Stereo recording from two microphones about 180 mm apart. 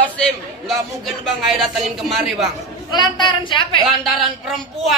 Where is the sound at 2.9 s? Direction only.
25° left (ahead or behind).